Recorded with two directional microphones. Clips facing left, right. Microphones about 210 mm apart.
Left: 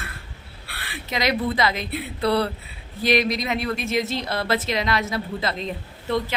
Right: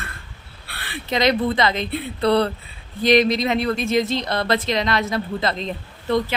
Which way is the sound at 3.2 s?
25° right (ahead or behind).